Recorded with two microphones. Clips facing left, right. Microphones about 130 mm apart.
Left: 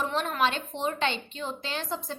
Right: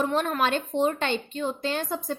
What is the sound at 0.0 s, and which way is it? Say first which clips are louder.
A woman's voice: right 3 dB; 50° right (ahead or behind).